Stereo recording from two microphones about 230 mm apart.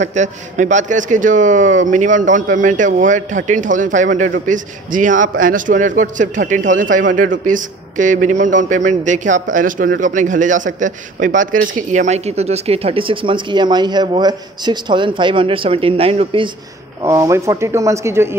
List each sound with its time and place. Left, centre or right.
0.0 s a man's voice: right
17.0 s speech: centre